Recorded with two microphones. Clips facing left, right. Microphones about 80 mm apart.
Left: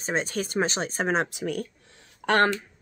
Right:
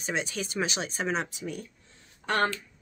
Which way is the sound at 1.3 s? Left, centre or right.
Left.